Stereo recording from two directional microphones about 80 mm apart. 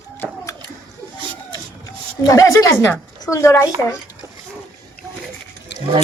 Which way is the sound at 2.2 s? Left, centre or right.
Left.